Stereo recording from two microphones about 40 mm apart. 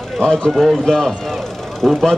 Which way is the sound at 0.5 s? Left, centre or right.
Centre.